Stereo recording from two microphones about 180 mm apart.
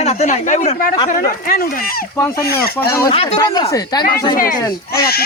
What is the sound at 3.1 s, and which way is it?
Speech, 30° left (ahead or behind).